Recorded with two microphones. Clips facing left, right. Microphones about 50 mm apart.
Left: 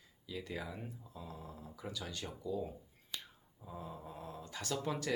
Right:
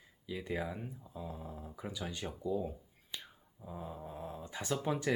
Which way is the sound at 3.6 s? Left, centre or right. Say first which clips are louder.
Right 2 dB; centre.